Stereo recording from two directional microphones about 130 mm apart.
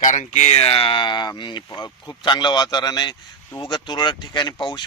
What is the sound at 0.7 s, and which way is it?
Speech, 40° left (ahead or behind).